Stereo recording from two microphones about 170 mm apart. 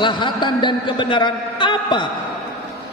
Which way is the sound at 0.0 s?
25° left (ahead or behind).